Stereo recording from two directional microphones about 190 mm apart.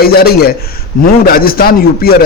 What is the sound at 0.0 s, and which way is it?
A man's voice, 55° left (ahead or behind).